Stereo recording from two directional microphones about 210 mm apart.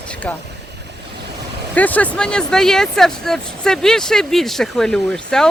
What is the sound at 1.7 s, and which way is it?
Speech, 5° left (ahead or behind).